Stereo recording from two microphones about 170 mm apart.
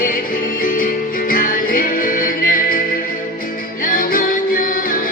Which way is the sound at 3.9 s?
55° left (ahead or behind).